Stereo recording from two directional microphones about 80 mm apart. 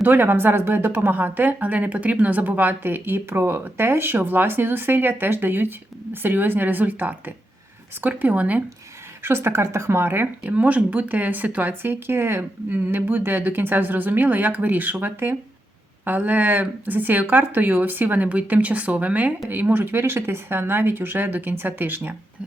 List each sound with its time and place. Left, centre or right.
0.0 s speech: right
9.2 s speech: right